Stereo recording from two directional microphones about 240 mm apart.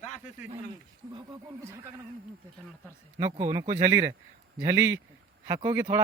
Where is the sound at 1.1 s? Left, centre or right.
Centre.